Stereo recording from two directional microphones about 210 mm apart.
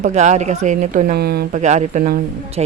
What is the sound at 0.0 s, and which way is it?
Speech, 35° right (ahead or behind).